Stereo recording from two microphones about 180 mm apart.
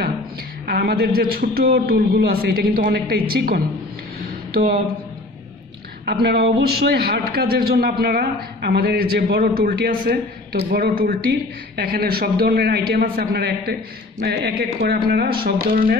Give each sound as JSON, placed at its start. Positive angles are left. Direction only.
{"t": 0.7, "sound": "a man's voice", "side_deg": -60}
{"t": 6.0, "sound": "a man's voice", "side_deg": -65}